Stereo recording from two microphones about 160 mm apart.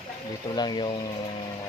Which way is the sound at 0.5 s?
25° left (ahead or behind).